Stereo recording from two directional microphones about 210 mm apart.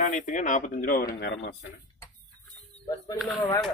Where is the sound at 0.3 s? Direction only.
35° left (ahead or behind); by 1.7 s 55° left (ahead or behind).